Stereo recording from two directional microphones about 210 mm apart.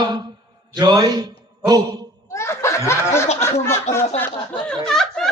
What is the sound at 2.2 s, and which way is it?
Snicker, 10° left (ahead or behind).